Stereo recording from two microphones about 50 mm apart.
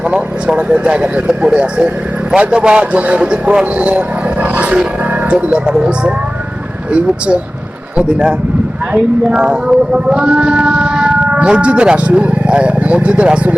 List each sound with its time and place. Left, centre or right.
0.1 s speech: right
4.5 s roar: right
5.3 s speech: right
7.9 s speech: right